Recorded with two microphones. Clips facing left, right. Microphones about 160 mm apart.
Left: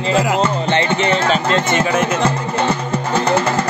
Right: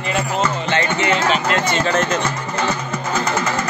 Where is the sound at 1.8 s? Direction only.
10° left (ahead or behind).